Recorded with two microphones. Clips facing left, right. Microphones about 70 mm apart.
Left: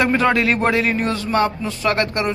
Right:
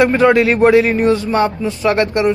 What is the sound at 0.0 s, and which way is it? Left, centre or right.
Speech, centre.